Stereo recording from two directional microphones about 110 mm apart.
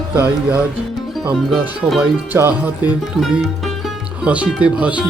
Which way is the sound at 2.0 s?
15° right (ahead or behind).